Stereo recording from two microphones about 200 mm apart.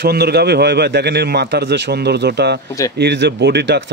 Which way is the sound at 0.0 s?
55° right (ahead or behind).